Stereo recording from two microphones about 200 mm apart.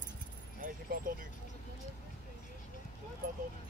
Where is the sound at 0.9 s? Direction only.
45° right (ahead or behind).